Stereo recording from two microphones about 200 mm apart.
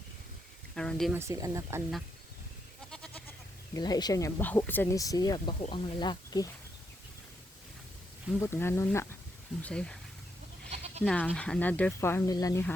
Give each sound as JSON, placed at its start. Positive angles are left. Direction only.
{"t": 0.8, "sound": "speech", "side_deg": 5}
{"t": 1.1, "sound": "speech", "side_deg": -15}
{"t": 2.9, "sound": "goat", "side_deg": 5}
{"t": 3.8, "sound": "speech", "side_deg": 20}
{"t": 8.4, "sound": "speech", "side_deg": 10}
{"t": 10.7, "sound": "goat", "side_deg": -30}
{"t": 11.0, "sound": "speech", "side_deg": 5}